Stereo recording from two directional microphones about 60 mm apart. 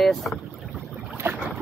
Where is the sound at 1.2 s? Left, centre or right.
Right.